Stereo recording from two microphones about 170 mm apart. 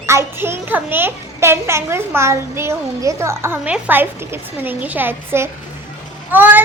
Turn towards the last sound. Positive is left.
turn(degrees=-10)  # may be behind; listen again after turning